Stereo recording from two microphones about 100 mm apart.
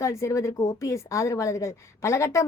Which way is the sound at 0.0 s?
30° left (ahead or behind).